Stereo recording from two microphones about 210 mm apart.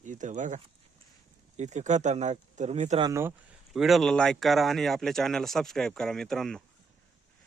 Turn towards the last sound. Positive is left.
turn(degrees=0)  # may be behind; listen again after turning